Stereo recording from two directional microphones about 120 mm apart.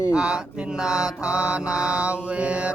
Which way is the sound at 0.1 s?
5° right (ahead or behind).